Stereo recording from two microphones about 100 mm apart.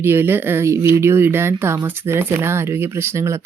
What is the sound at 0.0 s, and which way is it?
Speech, 20° right (ahead or behind).